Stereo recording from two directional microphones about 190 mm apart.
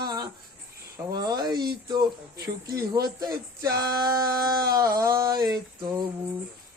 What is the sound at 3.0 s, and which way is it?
Speech, 20° right (ahead or behind).